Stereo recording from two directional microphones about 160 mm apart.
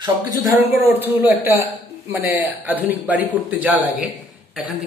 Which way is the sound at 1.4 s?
15° right (ahead or behind).